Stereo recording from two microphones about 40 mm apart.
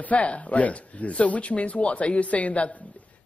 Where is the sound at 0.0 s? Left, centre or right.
Left.